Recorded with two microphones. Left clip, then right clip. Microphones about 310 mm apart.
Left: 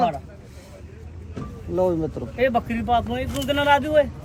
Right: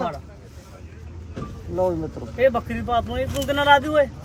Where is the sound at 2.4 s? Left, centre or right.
Centre.